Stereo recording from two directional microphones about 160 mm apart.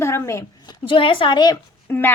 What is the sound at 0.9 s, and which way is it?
Speech, 30° left (ahead or behind).